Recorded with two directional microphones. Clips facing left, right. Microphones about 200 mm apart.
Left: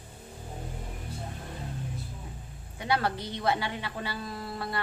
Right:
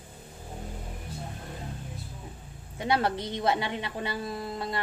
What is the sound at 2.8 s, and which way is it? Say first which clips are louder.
A woman's voice: right 2 dB; 20° right (ahead or behind).